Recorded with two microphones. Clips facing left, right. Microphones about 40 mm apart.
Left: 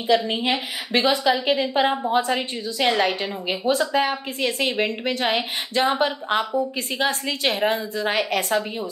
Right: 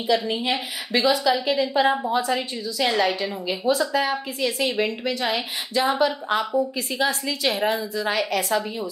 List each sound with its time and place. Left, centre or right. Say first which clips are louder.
0.0 s a woman's voice: left 2 dB; left